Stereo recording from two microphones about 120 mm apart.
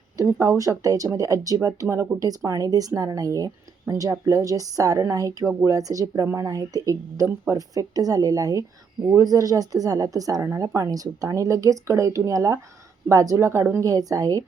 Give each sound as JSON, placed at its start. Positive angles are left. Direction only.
{"t": 0.2, "sound": "a woman's voice", "side_deg": -25}